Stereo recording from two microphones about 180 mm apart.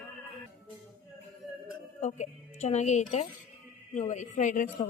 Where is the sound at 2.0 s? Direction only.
40° left (ahead or behind).